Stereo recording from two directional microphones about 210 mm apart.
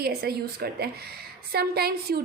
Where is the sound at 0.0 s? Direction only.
50° right (ahead or behind).